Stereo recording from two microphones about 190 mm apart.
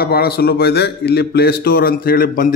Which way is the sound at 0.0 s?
55° left (ahead or behind).